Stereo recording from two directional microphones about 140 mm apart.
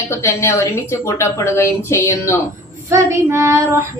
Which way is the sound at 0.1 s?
20° left (ahead or behind).